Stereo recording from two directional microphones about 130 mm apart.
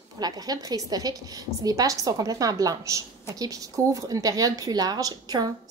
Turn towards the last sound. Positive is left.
turn(degrees=-30)  # may be behind; listen again after turning